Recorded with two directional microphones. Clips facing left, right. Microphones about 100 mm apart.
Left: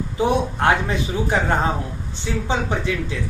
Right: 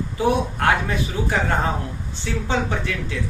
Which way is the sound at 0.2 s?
20° left (ahead or behind).